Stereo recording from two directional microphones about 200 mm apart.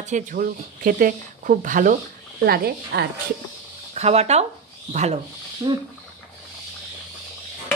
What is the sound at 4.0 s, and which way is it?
A woman's voice, 30° right (ahead or behind).